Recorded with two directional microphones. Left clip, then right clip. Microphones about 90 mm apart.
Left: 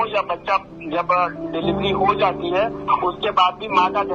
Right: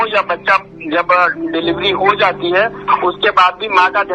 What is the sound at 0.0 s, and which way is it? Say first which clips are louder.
Speech: right 7 dB; 40° right (ahead or behind).